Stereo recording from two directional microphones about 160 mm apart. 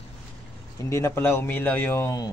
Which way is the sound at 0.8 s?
15° left (ahead or behind).